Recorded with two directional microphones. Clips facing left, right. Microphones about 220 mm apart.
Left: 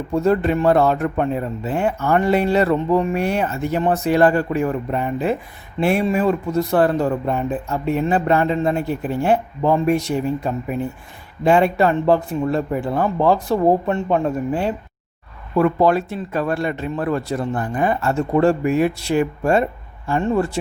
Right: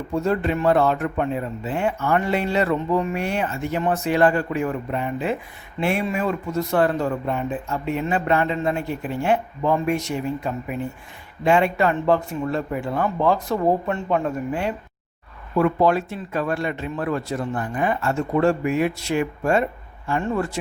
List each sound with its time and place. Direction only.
0.1 s speech: 40° left (ahead or behind)